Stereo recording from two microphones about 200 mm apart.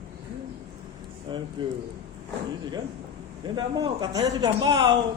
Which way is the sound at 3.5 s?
20° right (ahead or behind).